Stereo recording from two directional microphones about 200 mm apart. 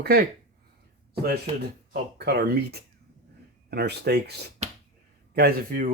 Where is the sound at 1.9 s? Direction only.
50° right (ahead or behind).